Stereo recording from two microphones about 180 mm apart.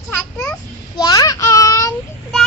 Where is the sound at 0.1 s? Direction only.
10° left (ahead or behind).